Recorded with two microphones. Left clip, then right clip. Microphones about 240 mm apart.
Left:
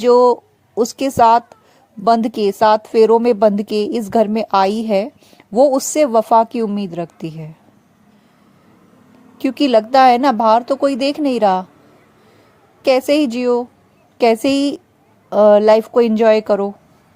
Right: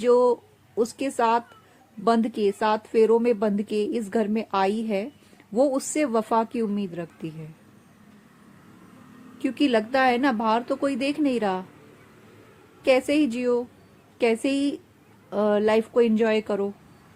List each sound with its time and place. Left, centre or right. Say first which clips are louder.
0.0 s a woman's voice: left 9 dB; left
9.4 s speech: left 9 dB; left
12.8 s speech: left 7 dB; left